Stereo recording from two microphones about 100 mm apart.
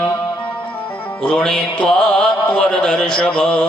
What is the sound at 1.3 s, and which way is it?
A man's voice, 5° left (ahead or behind).